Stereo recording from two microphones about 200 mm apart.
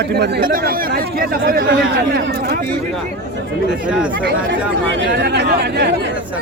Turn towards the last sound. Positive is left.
turn(degrees=-55)  # may be behind; listen again after turning